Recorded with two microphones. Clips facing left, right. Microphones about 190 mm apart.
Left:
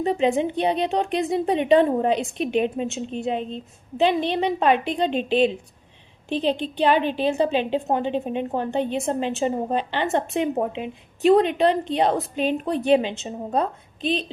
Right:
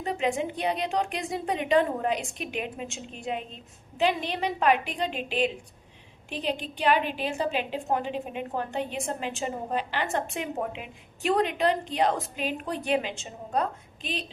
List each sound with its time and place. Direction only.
0.0 s a woman's voice: 25° left (ahead or behind)